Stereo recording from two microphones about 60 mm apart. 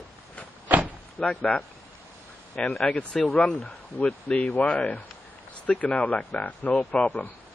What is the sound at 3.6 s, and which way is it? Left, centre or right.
Speech, left.